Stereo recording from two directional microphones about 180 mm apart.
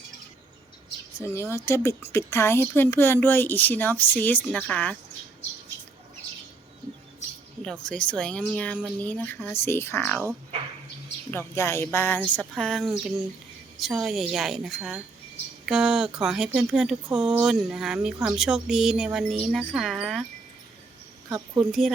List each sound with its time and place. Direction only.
1.2 s a woman's voice: 15° left (ahead or behind)
7.6 s a woman's voice: 5° left (ahead or behind)
11.3 s a woman's voice: 15° left (ahead or behind)
21.2 s a woman's voice: 15° right (ahead or behind)
21.6 s speech: centre (ahead or behind)